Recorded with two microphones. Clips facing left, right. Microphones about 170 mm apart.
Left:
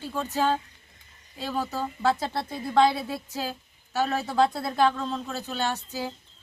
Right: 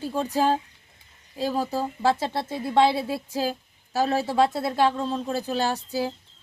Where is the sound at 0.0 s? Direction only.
35° right (ahead or behind).